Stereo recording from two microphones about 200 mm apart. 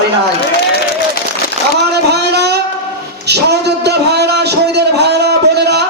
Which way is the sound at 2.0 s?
55° right (ahead or behind).